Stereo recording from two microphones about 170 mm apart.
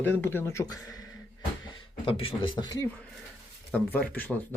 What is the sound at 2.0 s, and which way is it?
Speech, 30° left (ahead or behind).